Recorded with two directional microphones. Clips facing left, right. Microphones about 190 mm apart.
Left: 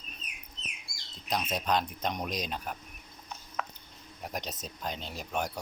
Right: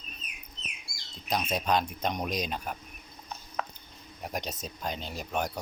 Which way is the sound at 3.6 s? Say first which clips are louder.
Right 2 dB; 35° right (ahead or behind).